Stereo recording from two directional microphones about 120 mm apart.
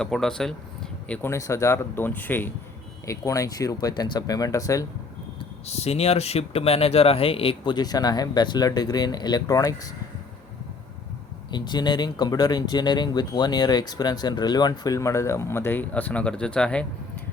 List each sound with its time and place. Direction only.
0.0 s speech: 5° left (ahead or behind)
1.3 s speech: 25° left (ahead or behind)
3.1 s speech: 25° left (ahead or behind)
5.6 s speech: 60° left (ahead or behind); by 9.9 s 30° left (ahead or behind)
11.5 s speech: 40° left (ahead or behind); by 16.8 s 10° left (ahead or behind)